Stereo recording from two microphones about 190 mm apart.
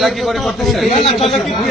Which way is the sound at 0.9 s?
35° left (ahead or behind).